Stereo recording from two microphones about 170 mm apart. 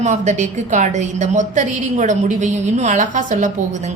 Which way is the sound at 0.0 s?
40° right (ahead or behind).